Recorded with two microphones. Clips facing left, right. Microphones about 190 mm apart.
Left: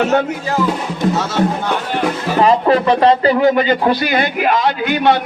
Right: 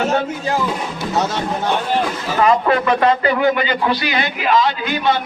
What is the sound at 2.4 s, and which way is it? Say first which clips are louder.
A man's voice: left 3 dB; 30° left (ahead or behind).